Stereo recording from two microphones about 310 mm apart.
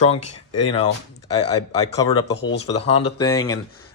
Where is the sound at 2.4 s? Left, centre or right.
Left.